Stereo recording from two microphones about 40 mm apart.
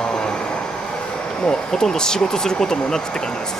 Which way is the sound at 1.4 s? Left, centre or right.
Centre.